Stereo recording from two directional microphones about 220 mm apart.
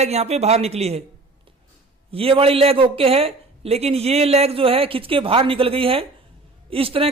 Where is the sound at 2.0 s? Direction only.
25° right (ahead or behind).